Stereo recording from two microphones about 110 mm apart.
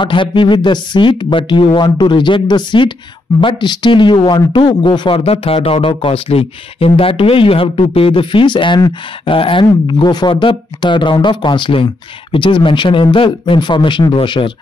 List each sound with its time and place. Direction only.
0.0 s speech: 50° left (ahead or behind)